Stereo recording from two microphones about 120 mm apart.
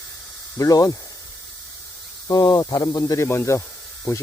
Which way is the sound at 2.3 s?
35° left (ahead or behind).